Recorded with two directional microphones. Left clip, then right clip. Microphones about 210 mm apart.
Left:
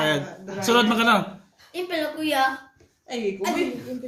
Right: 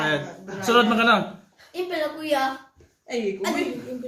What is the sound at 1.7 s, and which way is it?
Speech, 30° left (ahead or behind).